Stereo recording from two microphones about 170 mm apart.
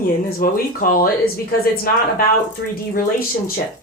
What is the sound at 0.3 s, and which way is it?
Speech, 60° left (ahead or behind).